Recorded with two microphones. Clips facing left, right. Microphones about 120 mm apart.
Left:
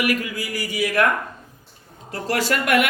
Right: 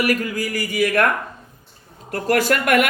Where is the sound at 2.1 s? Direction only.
50° right (ahead or behind).